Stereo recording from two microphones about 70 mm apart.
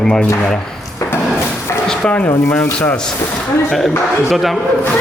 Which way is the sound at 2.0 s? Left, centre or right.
Centre.